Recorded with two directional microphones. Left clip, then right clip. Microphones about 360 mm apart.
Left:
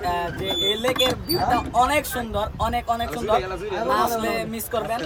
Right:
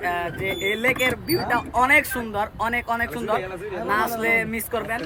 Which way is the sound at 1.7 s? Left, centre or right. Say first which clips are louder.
Right 2 dB; centre.